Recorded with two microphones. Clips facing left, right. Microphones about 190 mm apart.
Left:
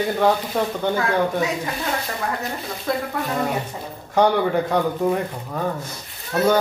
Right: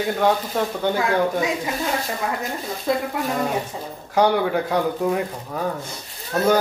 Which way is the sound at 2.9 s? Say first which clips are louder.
Right 2 dB; 15° right (ahead or behind).